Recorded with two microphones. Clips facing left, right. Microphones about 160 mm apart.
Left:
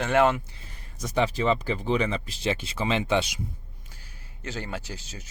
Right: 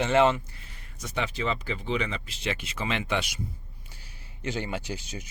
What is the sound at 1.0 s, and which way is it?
Speech, 40° left (ahead or behind).